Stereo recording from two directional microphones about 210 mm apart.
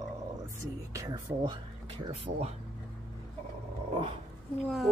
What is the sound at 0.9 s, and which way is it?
Speech, 15° right (ahead or behind).